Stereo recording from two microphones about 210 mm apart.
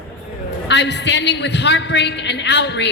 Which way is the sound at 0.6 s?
55° left (ahead or behind).